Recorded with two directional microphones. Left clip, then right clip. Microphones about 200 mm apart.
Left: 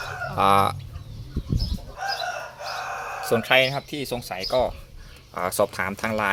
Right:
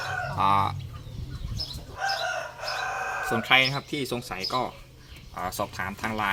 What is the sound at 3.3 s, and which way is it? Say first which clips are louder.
Speech: left 3 dB; 30° left (ahead or behind).